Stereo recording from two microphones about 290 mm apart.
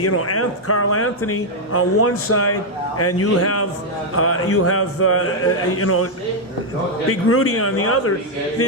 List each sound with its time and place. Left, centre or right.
0.0 s speech: left
7.1 s speech: left